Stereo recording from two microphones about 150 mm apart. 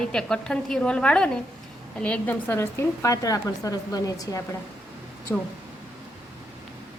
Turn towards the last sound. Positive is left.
turn(degrees=5)  # may be behind; listen again after turning